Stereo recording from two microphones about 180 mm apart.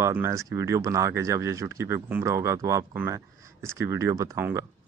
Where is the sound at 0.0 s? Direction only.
15° right (ahead or behind).